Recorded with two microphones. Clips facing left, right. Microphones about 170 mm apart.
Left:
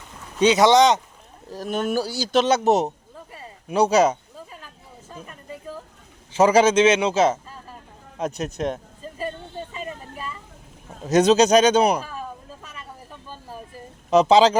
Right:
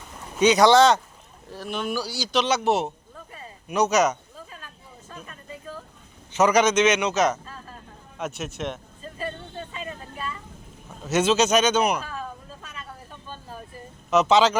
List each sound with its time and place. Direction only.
0.3 s speech: 25° left (ahead or behind)
1.5 s speech: 40° left (ahead or behind)
3.7 s a man's voice: 30° left (ahead or behind)
6.3 s a man's voice: 30° left (ahead or behind)
7.4 s vehicle: 15° left (ahead or behind)
8.2 s a man's voice: 40° left (ahead or behind)
11.0 s a man's voice: 35° left (ahead or behind)
13.2 s a sound: 10° left (ahead or behind)
14.1 s a man's voice: 35° left (ahead or behind)